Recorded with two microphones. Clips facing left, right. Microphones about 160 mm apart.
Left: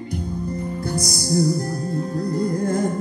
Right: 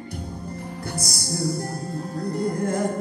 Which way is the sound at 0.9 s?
40° left (ahead or behind).